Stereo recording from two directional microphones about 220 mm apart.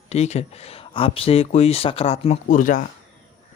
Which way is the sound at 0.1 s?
30° left (ahead or behind).